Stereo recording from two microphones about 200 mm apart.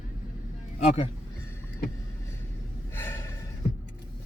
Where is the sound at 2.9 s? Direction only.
10° left (ahead or behind).